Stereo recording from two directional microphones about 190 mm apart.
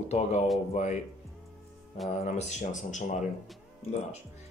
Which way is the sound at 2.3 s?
40° left (ahead or behind).